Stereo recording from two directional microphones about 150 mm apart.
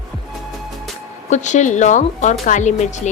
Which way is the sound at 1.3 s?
55° left (ahead or behind).